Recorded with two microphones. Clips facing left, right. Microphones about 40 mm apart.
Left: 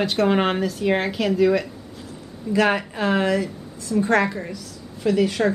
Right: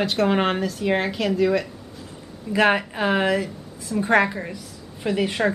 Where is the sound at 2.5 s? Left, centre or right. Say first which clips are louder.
Right 1 dB; centre.